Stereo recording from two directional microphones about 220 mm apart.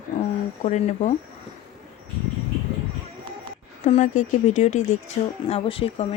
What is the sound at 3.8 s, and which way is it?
A woman's voice, 35° left (ahead or behind).